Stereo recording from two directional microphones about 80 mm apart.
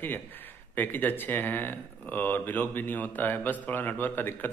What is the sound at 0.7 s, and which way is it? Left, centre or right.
Speech, left.